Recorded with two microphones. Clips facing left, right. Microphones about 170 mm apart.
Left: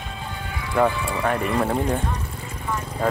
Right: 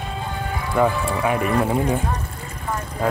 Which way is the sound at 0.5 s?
45° right (ahead or behind).